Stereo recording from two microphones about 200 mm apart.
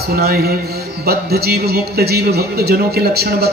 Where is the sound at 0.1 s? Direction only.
50° right (ahead or behind).